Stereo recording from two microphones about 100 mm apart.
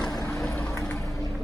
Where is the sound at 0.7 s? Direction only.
25° left (ahead or behind).